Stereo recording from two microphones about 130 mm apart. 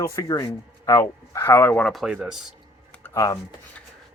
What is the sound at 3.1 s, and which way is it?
Speech, 25° left (ahead or behind).